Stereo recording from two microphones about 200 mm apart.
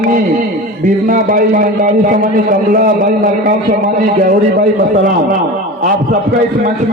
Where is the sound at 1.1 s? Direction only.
45° right (ahead or behind).